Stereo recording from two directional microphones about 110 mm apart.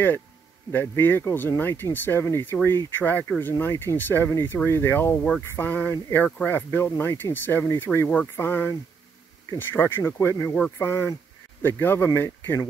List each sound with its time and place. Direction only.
0.7 s speech: 20° left (ahead or behind)